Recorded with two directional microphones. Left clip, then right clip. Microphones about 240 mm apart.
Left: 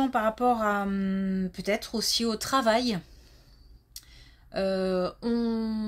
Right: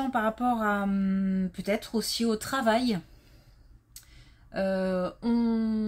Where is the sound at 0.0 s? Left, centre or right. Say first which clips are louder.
Left 3 dB; left.